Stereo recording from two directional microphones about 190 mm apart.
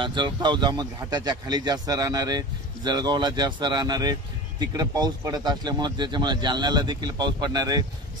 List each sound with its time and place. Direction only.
0.0 s speech: 25° right (ahead or behind)